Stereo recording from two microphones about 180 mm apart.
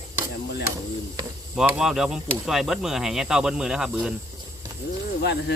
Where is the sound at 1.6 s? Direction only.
5° right (ahead or behind).